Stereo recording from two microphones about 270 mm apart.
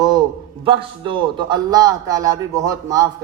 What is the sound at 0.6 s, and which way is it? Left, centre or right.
A man's voice, centre.